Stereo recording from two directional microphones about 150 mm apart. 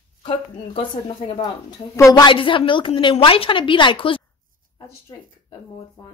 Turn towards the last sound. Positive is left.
turn(degrees=35)  # may be behind; listen again after turning